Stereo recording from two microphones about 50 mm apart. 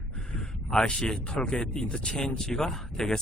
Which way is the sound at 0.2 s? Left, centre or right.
Centre.